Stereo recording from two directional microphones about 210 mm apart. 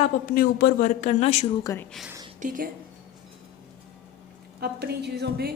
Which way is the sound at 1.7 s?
15° left (ahead or behind).